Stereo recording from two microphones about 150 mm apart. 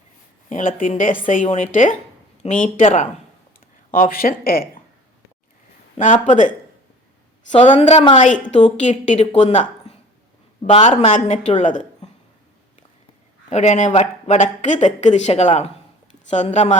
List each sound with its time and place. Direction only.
0.8 s a woman's voice: 60° left (ahead or behind)
3.9 s speech: 70° left (ahead or behind); by 4.7 s 90° left
6.2 s a woman's voice: 60° left (ahead or behind)
7.7 s a woman's voice: 45° left (ahead or behind)
13.5 s speech: 50° left (ahead or behind)